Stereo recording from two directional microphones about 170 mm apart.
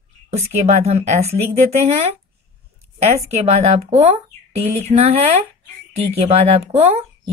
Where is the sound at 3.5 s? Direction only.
35° right (ahead or behind).